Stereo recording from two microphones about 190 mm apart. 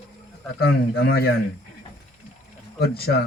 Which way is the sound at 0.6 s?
55° left (ahead or behind).